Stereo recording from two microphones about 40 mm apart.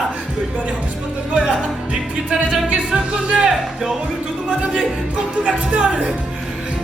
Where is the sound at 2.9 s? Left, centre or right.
Right.